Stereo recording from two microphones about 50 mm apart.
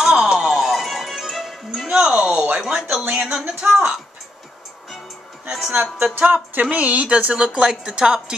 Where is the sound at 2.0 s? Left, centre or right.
Centre.